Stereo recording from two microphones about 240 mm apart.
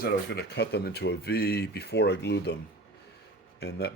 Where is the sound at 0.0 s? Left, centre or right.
Left.